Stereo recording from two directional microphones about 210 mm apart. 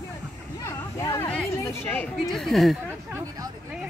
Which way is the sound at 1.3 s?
5° left (ahead or behind).